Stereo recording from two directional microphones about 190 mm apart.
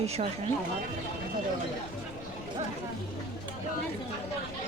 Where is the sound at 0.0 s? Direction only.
30° right (ahead or behind).